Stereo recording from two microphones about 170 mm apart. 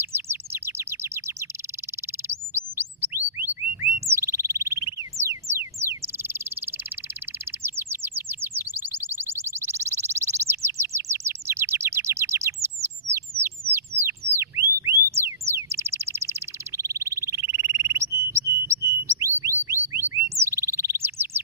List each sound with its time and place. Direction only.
0.1 s chirp: 15° right (ahead or behind)
5.2 s a sound: 15° right (ahead or behind)
5.9 s bird: 15° right (ahead or behind)
7.6 s chirp: 15° right (ahead or behind)
12.6 s bird: 15° right (ahead or behind)
14.3 s a sound: 15° right (ahead or behind)